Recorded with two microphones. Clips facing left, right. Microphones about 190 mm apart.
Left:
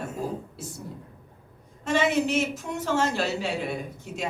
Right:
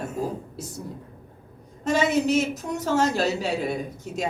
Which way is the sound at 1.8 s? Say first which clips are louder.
Right 2 dB; 40° right (ahead or behind).